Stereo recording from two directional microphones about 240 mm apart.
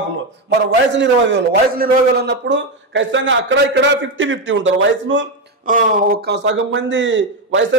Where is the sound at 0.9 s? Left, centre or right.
Right.